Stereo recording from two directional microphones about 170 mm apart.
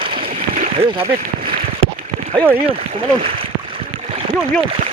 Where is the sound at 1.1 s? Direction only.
55° right (ahead or behind).